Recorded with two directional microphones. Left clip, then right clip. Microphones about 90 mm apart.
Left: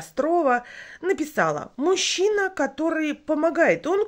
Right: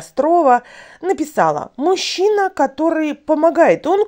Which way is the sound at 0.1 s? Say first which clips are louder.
Right 8 dB; 45° right (ahead or behind).